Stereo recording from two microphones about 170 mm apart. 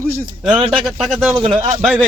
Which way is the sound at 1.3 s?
30° right (ahead or behind).